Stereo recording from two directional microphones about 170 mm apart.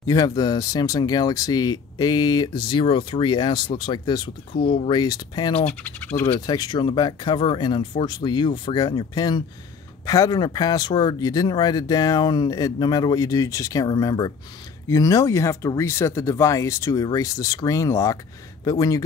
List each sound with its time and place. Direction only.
0.0 s speech: 20° left (ahead or behind)
5.7 s speech: 10° left (ahead or behind)
6.4 s speech: 25° left (ahead or behind)